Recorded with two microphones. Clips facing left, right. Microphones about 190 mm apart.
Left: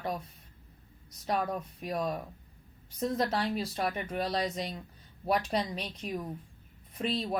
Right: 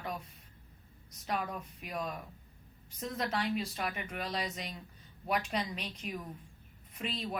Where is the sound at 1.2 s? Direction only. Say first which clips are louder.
Left 5 dB; 35° left (ahead or behind).